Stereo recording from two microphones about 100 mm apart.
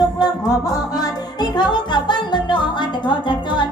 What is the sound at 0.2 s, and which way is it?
Music, 40° left (ahead or behind).